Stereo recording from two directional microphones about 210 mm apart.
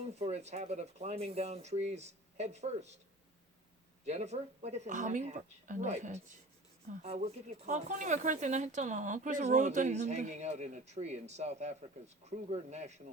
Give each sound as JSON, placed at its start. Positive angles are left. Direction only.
{"t": 0.2, "sound": "speech", "side_deg": -30}
{"t": 4.0, "sound": "speech", "side_deg": -30}